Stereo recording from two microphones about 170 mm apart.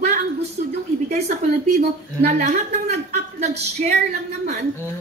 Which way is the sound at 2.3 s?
45° right (ahead or behind).